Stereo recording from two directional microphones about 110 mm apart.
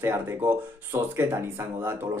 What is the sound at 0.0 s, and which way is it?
Speech, 20° right (ahead or behind).